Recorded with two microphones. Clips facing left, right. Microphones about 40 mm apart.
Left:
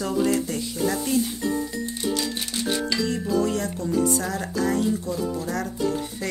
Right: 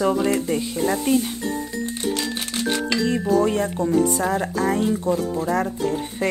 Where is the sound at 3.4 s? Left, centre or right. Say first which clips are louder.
Right 5 dB; right.